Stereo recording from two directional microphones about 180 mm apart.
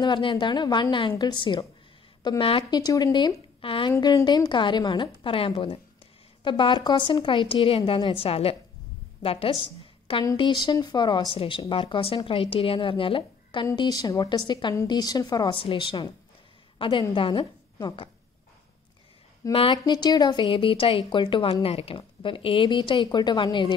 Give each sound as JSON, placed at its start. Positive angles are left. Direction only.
{"t": 0.0, "sound": "a woman's voice", "side_deg": 25}
{"t": 19.5, "sound": "a woman's voice", "side_deg": 30}